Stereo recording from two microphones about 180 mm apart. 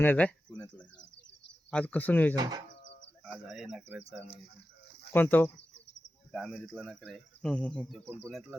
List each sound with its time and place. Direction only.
0.0 s speech: 10° left (ahead or behind)
1.7 s speech: 10° left (ahead or behind)
2.3 s speech: 25° right (ahead or behind)
3.2 s speech: 5° right (ahead or behind)
5.1 s speech: 10° left (ahead or behind)